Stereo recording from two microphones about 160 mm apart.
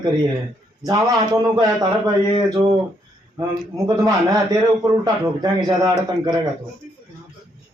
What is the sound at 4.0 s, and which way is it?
A man's voice, 25° right (ahead or behind).